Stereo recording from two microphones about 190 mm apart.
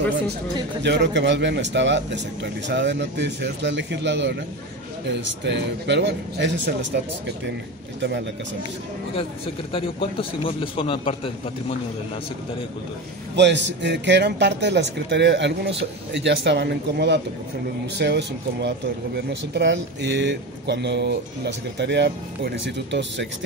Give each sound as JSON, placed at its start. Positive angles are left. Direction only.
{"t": 0.8, "sound": "a man's voice", "side_deg": -65}
{"t": 9.7, "sound": "a man's voice", "side_deg": 30}
{"t": 13.4, "sound": "speech", "side_deg": -65}